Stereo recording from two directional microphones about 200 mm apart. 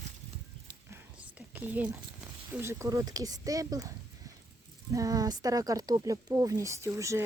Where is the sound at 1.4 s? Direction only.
5° right (ahead or behind).